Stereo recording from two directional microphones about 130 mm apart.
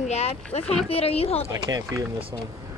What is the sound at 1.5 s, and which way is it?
Speech, 25° right (ahead or behind).